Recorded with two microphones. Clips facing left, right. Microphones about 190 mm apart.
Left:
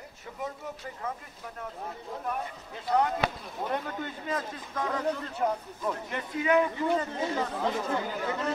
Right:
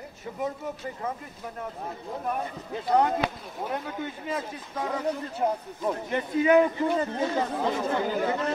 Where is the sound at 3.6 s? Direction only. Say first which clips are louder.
Right 1 dB; 5° right (ahead or behind).